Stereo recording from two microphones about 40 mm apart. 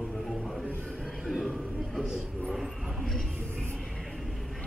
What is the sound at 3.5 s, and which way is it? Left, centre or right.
Music, left.